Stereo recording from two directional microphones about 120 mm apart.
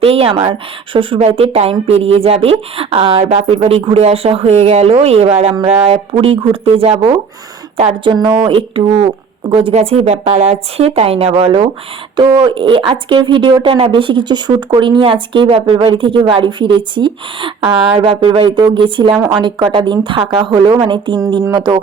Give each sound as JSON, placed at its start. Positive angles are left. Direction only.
{"t": 0.0, "sound": "a woman's voice", "side_deg": -55}
{"t": 8.1, "sound": "a woman's voice", "side_deg": -40}
{"t": 12.1, "sound": "speech", "side_deg": -40}